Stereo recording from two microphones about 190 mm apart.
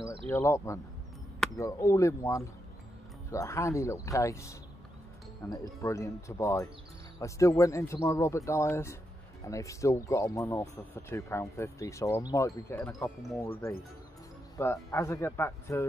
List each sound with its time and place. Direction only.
0.3 s speech: 15° left (ahead or behind)
14.6 s speech: 15° left (ahead or behind)